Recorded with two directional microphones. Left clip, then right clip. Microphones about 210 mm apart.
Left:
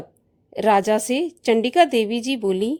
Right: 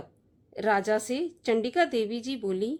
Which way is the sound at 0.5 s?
35° left (ahead or behind).